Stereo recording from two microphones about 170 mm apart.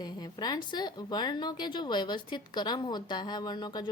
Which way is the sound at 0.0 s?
25° left (ahead or behind).